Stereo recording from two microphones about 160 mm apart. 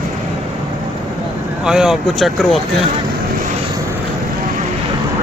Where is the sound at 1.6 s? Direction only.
5° right (ahead or behind).